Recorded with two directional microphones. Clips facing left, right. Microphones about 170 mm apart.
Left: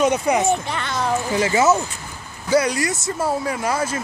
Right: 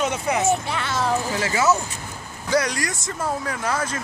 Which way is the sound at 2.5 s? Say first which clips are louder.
Left 4 dB; 5° left (ahead or behind).